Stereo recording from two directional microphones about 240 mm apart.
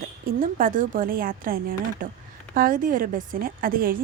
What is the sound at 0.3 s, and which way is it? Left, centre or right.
A woman's voice, right.